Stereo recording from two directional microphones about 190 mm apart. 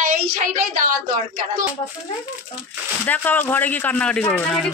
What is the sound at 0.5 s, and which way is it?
Speech, 45° right (ahead or behind).